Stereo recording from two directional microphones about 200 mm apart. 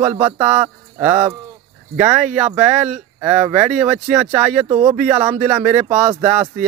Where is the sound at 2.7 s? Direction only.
35° right (ahead or behind).